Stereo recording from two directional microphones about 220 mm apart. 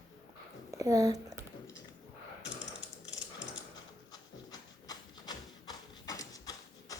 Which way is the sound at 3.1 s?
55° left (ahead or behind).